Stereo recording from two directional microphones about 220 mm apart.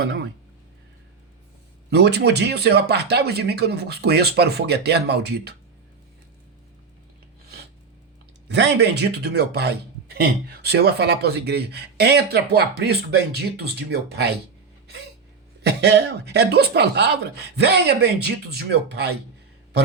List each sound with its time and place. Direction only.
0.0 s a man's voice: 50° right (ahead or behind)
1.9 s a man's voice: 50° right (ahead or behind)
8.4 s a man's voice: 50° right (ahead or behind)
15.6 s a man's voice: 50° right (ahead or behind)